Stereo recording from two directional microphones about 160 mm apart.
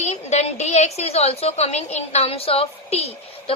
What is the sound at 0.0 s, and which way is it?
A woman's voice, 45° left (ahead or behind).